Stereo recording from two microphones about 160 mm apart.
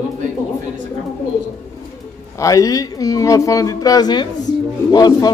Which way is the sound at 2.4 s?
20° left (ahead or behind).